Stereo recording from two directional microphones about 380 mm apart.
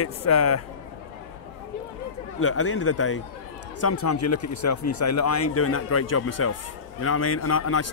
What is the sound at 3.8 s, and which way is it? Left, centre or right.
A man's voice, left.